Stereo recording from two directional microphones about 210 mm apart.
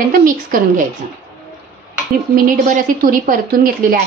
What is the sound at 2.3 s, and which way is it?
A woman's voice, 40° right (ahead or behind).